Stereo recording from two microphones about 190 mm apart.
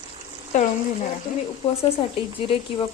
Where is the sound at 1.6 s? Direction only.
35° left (ahead or behind).